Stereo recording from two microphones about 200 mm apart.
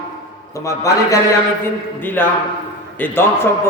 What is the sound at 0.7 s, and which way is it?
Speech, 15° left (ahead or behind).